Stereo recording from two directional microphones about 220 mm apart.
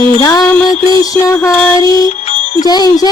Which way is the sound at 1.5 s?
5° left (ahead or behind).